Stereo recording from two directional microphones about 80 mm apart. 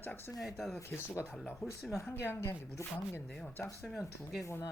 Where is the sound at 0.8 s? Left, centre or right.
Left.